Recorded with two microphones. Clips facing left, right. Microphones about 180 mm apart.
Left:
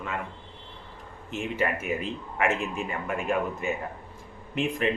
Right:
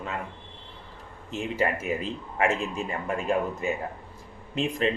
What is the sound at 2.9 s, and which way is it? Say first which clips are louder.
Speech: right 3 dB; 30° right (ahead or behind).